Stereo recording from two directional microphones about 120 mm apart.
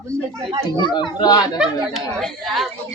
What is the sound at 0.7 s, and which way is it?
Speech, 40° left (ahead or behind).